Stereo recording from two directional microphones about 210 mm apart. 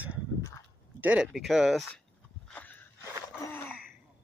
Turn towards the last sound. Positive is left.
turn(degrees=5)  # may be behind; listen again after turning